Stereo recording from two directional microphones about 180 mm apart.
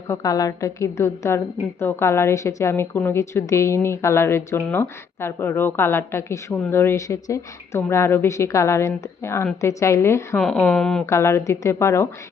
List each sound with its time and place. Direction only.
0.1 s a woman's voice: 20° left (ahead or behind); by 11.0 s 5° left (ahead or behind)
11.0 s a woman's voice: 15° left (ahead or behind)